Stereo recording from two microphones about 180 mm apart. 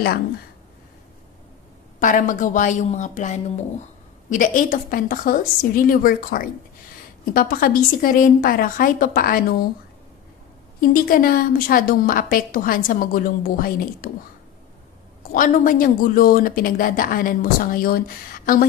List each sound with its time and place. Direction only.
2.0 s a woman's voice: 45° left (ahead or behind)
10.8 s a woman's voice: 50° left (ahead or behind)
15.3 s a woman's voice: 50° left (ahead or behind)